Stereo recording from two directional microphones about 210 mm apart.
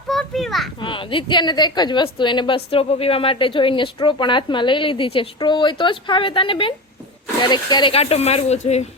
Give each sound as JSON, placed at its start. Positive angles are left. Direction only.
{"t": 0.1, "sound": "children playing", "side_deg": 0}
{"t": 0.8, "sound": "speech", "side_deg": 25}